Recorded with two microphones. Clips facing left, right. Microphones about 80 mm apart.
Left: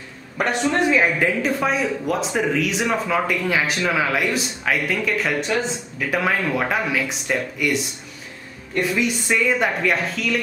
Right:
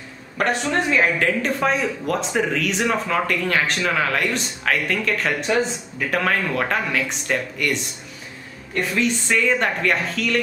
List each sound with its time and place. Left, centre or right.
0.4 s a woman's voice: centre